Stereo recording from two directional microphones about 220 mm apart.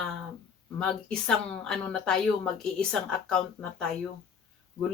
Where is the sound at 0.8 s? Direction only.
5° left (ahead or behind).